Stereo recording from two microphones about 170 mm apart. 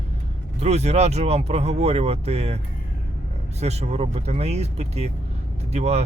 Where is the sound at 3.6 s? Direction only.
40° right (ahead or behind).